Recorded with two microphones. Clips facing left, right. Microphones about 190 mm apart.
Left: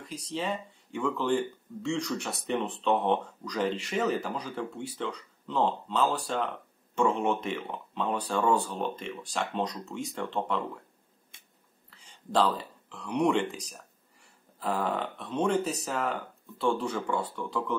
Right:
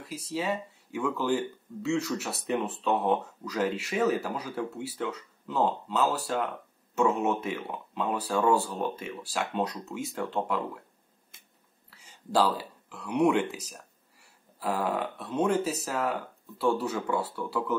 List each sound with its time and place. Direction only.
0.0 s speech: 5° right (ahead or behind)
11.3 s finger snapping: centre (ahead or behind)
11.9 s speech: 5° right (ahead or behind)